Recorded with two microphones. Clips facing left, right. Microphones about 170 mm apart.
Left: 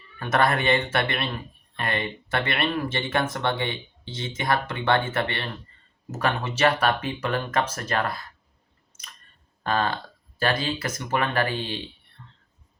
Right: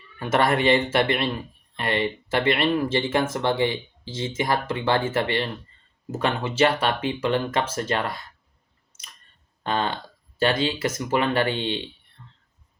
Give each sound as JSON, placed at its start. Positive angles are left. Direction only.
{"t": 0.2, "sound": "speech", "side_deg": -25}
{"t": 9.6, "sound": "speech", "side_deg": -25}